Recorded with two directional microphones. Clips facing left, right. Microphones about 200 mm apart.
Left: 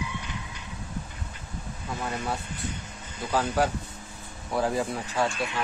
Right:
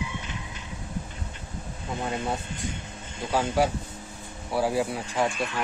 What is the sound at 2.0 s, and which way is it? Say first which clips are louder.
Speech: right 2 dB; 25° right (ahead or behind).